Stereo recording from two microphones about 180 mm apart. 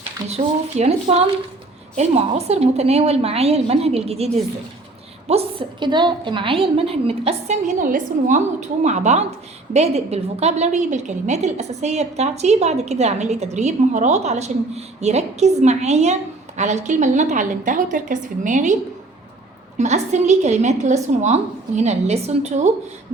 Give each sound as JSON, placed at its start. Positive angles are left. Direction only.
{"t": 0.3, "sound": "a woman's voice", "side_deg": -35}
{"t": 5.3, "sound": "a woman's voice", "side_deg": -30}
{"t": 19.8, "sound": "a woman's voice", "side_deg": -40}